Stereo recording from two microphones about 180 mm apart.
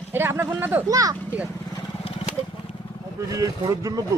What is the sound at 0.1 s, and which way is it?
Speech, 10° right (ahead or behind).